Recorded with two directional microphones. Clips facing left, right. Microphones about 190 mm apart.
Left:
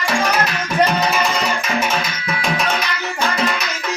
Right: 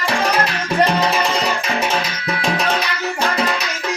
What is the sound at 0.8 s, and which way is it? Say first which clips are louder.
Music: even; 30° right (ahead or behind).